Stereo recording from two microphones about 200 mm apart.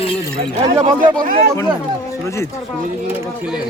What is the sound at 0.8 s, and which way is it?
Speech, 45° right (ahead or behind).